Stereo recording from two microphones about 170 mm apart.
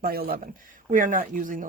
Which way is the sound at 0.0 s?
60° right (ahead or behind).